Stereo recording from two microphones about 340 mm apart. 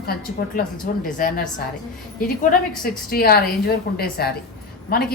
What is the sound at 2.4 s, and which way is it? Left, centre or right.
A woman's voice, left.